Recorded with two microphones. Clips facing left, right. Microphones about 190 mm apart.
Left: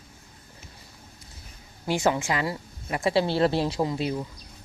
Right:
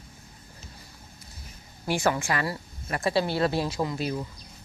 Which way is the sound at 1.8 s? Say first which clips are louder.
Left 1 dB; 20° left (ahead or behind).